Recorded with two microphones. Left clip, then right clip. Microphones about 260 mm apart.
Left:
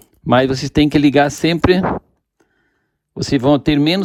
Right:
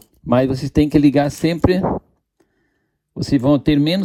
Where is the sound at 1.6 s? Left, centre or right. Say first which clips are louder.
Left 3 dB; right.